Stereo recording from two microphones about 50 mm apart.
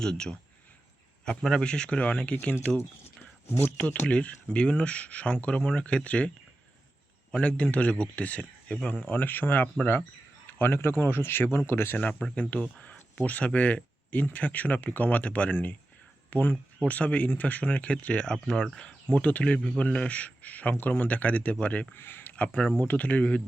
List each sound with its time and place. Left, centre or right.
0.0 s a man's voice: centre; by 2.6 s left
3.4 s speech: left
4.1 s speech: left
7.4 s speech: left
8.6 s speech: centre
9.0 s speech: left
10.6 s speech: left
12.3 s speech: left
19.1 s speech: left
21.9 s speech: left
22.5 s speech: centre
22.8 s speech: left